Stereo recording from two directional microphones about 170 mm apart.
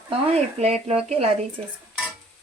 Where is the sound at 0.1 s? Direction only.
35° right (ahead or behind).